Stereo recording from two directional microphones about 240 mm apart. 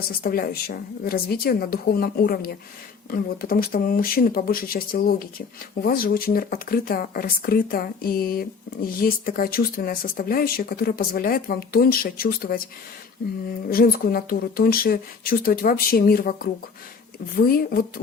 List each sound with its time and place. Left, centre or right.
0.2 s speech: left
13.7 s speech: left